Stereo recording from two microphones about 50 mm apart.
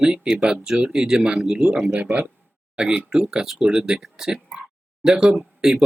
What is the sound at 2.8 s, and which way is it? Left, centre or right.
Speech, centre.